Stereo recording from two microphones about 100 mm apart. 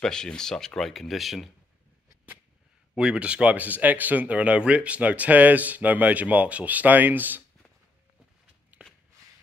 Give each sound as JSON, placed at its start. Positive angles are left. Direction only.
{"t": 0.0, "sound": "speech", "side_deg": 5}
{"t": 3.0, "sound": "speech", "side_deg": -10}
{"t": 8.7, "sound": "a sound", "side_deg": -15}